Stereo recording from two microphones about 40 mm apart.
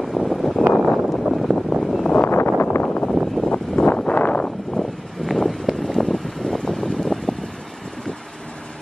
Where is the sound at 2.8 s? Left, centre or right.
Left.